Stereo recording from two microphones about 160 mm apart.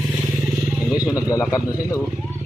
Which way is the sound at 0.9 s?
20° left (ahead or behind).